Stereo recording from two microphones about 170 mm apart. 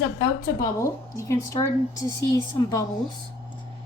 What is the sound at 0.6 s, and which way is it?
A woman's voice, 20° left (ahead or behind).